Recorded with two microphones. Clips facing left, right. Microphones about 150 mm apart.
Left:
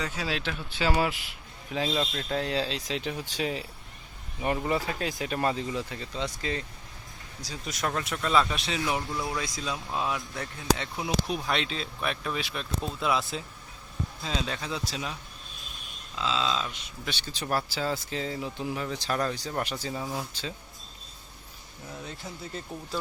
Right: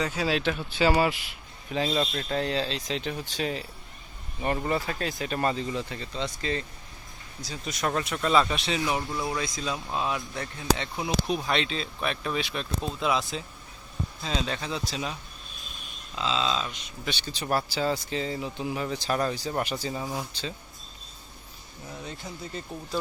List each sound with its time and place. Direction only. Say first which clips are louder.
0.3 s speech: right 8 dB; 40° right (ahead or behind)
0.8 s speech: right 3 dB; 5° right (ahead or behind)
7.9 s speech: right 3 dB; 10° right (ahead or behind)
16.1 s speech: right 1 dB; 20° right (ahead or behind)
16.5 s speech: right 1 dB; 10° right (ahead or behind)
21.9 s speech: right 1 dB; centre (ahead or behind)